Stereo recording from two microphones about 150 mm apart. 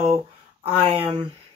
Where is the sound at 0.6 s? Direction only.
40° right (ahead or behind).